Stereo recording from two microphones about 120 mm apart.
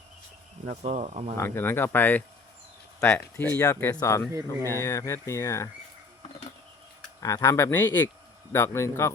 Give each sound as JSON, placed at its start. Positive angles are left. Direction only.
{"t": 0.6, "sound": "speech", "side_deg": -60}
{"t": 1.4, "sound": "speech", "side_deg": 20}
{"t": 4.3, "sound": "speech", "side_deg": -25}
{"t": 4.8, "sound": "speech", "side_deg": 25}
{"t": 7.2, "sound": "speech", "side_deg": 25}